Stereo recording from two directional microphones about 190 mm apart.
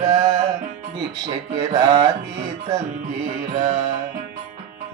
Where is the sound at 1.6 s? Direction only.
20° right (ahead or behind).